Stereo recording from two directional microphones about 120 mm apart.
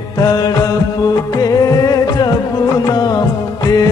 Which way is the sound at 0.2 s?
35° left (ahead or behind).